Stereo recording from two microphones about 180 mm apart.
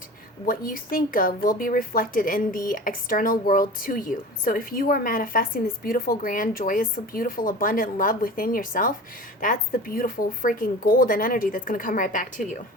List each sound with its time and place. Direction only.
0.4 s speech: 50° left (ahead or behind)